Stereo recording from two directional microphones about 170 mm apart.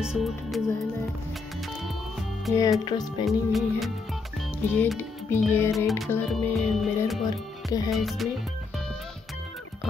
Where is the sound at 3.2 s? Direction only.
Centre (ahead or behind).